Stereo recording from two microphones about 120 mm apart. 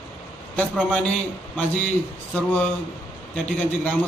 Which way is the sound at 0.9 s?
10° left (ahead or behind).